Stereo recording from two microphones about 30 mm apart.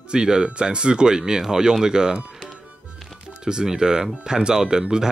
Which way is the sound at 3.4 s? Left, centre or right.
Right.